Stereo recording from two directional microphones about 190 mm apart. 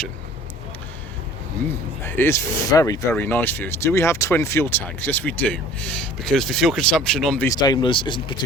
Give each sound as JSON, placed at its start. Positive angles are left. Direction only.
{"t": 2.0, "sound": "speech", "side_deg": 10}
{"t": 7.5, "sound": "speech", "side_deg": 20}